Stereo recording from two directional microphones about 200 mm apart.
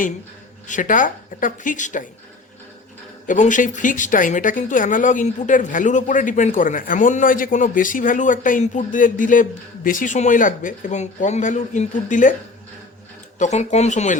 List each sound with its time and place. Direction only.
0.7 s a woman's voice: 40° left (ahead or behind)
3.2 s a woman's voice: 40° left (ahead or behind)
13.4 s a woman's voice: 35° left (ahead or behind)